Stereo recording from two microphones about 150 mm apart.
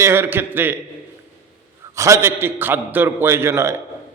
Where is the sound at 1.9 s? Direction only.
20° right (ahead or behind).